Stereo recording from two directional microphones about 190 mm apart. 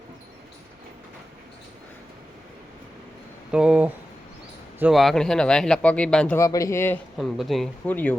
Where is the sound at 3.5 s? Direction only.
5° right (ahead or behind).